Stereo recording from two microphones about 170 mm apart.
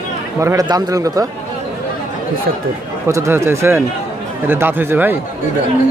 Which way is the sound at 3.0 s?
15° right (ahead or behind).